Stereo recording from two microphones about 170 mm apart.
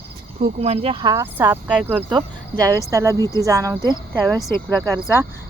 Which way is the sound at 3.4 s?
20° right (ahead or behind).